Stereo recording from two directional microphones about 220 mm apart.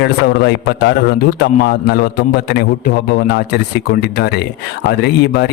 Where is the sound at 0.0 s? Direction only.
50° left (ahead or behind).